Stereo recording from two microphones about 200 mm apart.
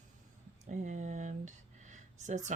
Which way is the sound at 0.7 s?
35° right (ahead or behind).